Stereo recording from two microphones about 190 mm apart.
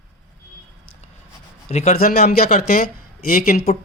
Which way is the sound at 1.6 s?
35° left (ahead or behind).